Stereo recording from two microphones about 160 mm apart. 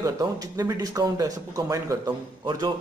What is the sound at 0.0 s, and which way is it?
A man's voice, 20° right (ahead or behind).